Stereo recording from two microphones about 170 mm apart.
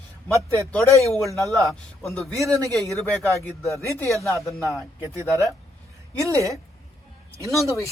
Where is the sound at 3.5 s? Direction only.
15° left (ahead or behind).